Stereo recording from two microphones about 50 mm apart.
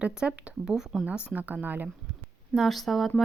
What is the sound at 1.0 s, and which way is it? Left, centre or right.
Speech, right.